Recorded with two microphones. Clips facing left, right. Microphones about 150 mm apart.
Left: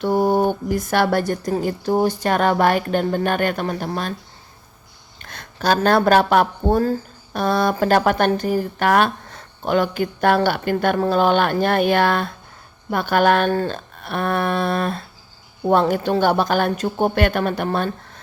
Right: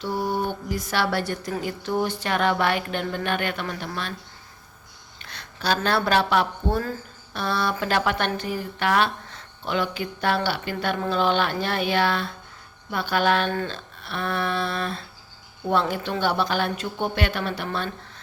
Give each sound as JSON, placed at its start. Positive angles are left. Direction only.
{"t": 0.0, "sound": "speech", "side_deg": 50}
{"t": 5.2, "sound": "speech", "side_deg": 45}